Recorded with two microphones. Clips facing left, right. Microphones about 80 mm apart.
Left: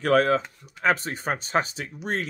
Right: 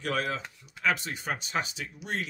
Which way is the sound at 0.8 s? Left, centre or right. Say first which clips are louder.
Left 5 dB; left.